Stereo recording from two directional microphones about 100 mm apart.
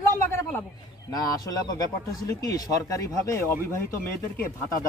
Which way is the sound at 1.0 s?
40° left (ahead or behind).